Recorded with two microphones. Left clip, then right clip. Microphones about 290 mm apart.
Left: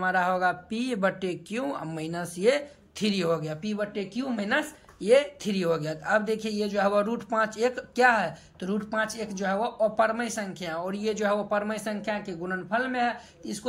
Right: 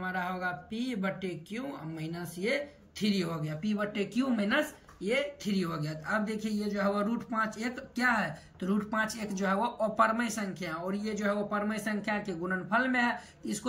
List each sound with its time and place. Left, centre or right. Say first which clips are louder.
0.0 s speech: left 10 dB; centre